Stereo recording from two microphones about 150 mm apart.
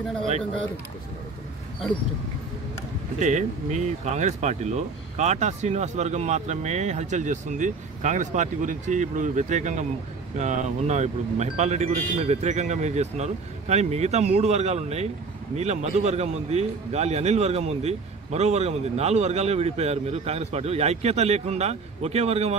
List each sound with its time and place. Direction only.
3.2 s a man's voice: 50° right (ahead or behind)